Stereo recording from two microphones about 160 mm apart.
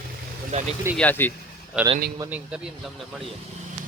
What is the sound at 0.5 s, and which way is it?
Speech, 45° right (ahead or behind).